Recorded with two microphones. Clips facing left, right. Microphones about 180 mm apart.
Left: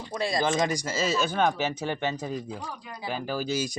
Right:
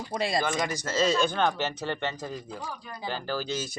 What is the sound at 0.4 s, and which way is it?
Speech, 20° left (ahead or behind).